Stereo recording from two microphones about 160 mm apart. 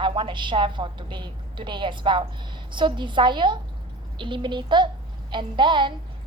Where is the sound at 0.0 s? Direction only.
30° right (ahead or behind).